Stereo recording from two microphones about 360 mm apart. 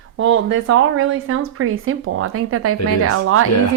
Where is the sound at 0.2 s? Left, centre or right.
Right.